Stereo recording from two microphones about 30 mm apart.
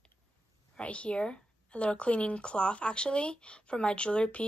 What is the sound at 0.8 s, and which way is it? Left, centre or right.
Speech, left.